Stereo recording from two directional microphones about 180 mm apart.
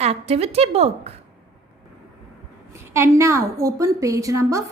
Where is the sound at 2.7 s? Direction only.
15° right (ahead or behind).